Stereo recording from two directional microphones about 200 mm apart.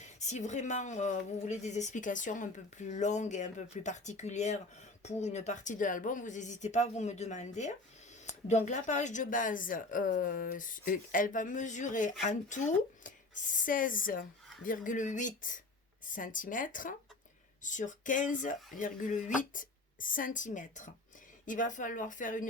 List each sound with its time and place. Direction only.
0.0 s a woman's voice: 35° left (ahead or behind)